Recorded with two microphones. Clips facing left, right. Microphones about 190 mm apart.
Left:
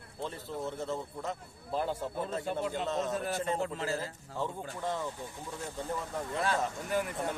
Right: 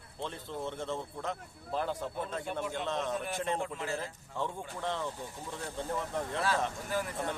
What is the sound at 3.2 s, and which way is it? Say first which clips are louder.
Speech: left 2 dB; 40° left (ahead or behind).